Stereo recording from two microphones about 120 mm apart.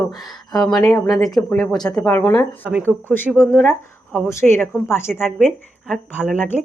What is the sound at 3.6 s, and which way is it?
Speech, 20° left (ahead or behind).